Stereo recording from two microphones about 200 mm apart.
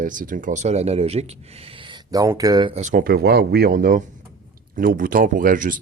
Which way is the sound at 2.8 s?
40° right (ahead or behind).